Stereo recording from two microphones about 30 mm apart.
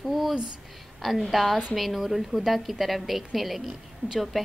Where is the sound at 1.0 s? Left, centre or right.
Centre.